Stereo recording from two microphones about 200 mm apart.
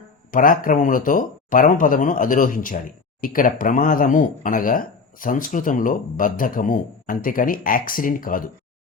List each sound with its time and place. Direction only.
0.3 s speech: 45° left (ahead or behind)